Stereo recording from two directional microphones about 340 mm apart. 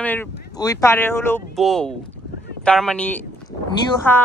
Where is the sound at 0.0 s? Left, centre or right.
Centre.